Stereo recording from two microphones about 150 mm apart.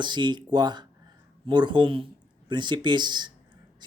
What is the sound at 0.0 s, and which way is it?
Speech, 30° right (ahead or behind).